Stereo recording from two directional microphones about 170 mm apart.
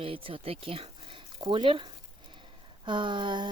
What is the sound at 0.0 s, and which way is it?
Speech, 30° right (ahead or behind).